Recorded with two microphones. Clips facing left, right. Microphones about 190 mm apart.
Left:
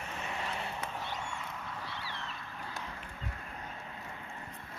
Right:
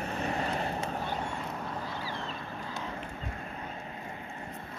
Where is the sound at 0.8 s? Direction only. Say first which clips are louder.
Right 6 dB; 40° right (ahead or behind).